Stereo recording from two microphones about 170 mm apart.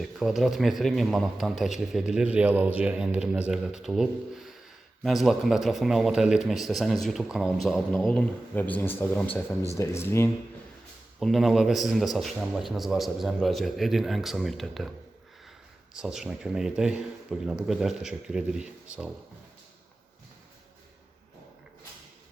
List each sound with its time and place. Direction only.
0.0 s speech: centre (ahead or behind); by 10.3 s 15° left (ahead or behind)
11.2 s speech: centre (ahead or behind)
16.0 s speech: 5° right (ahead or behind)